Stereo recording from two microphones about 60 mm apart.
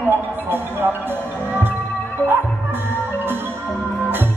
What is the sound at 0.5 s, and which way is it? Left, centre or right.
Music, right.